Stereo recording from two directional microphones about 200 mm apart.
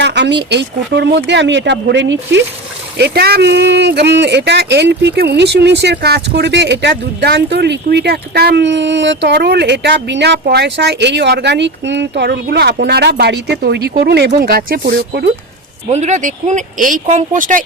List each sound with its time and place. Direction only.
0.0 s speech: 60° right (ahead or behind)
3.0 s speech: 50° right (ahead or behind)
15.9 s speech: 35° right (ahead or behind)